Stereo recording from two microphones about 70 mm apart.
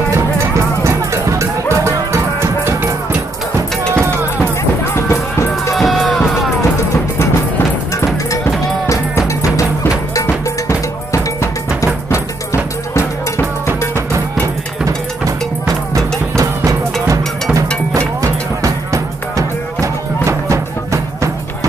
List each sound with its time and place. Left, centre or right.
0.8 s music: right
3.5 s a sound: right
4.9 s music: left
5.8 s music: centre
8.8 s music: left
10.2 s cowbell: left
14.9 s music: right